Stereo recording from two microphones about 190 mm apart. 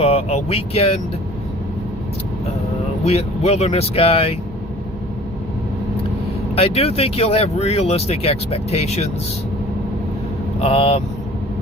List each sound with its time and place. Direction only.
0.0 s speech: 35° left (ahead or behind)
3.0 s speech: 35° left (ahead or behind)
6.6 s speech: 30° left (ahead or behind)
10.6 s speech: 30° left (ahead or behind)